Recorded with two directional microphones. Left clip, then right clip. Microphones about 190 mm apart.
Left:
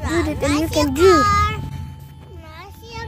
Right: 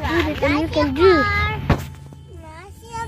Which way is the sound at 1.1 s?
30° right (ahead or behind).